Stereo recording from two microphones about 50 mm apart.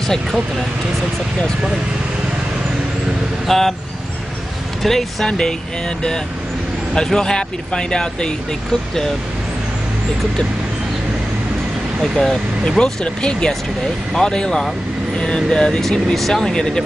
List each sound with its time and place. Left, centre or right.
0.0 s speech: centre
3.4 s speech: centre
4.8 s speech: centre
7.0 s speech: centre
12.0 s speech: centre